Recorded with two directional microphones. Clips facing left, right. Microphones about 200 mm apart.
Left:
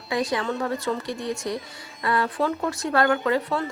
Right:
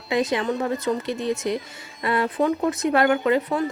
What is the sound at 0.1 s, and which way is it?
Speech, 20° right (ahead or behind).